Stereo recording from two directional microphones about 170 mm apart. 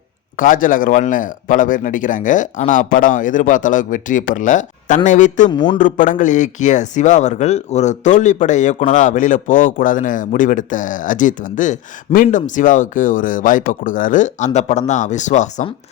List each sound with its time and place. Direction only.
0.3 s speech: 50° left (ahead or behind)
5.5 s a man's voice: 25° left (ahead or behind)
5.7 s speech: 50° left (ahead or behind)